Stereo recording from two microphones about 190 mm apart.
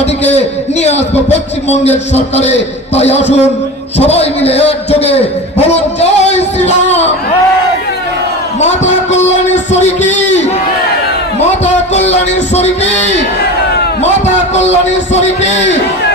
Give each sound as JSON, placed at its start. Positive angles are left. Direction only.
{"t": 0.0, "sound": "a man's voice", "side_deg": 35}
{"t": 8.8, "sound": "music", "side_deg": 35}
{"t": 9.7, "sound": "a sound", "side_deg": 35}
{"t": 12.5, "sound": "a man's voice", "side_deg": 35}
{"t": 15.1, "sound": "a man's voice", "side_deg": 35}